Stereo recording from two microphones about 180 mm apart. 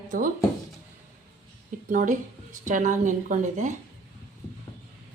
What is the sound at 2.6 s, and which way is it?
A woman's voice, 45° right (ahead or behind).